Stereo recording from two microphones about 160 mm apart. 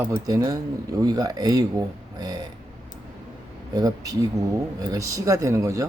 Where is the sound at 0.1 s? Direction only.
20° right (ahead or behind).